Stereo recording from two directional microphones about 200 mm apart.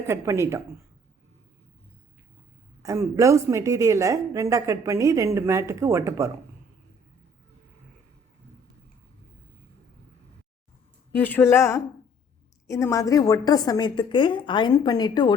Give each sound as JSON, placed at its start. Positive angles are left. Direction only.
{"t": 0.1, "sound": "a woman's voice", "side_deg": -15}
{"t": 2.8, "sound": "a woman's voice", "side_deg": -15}
{"t": 11.2, "sound": "a woman's voice", "side_deg": 10}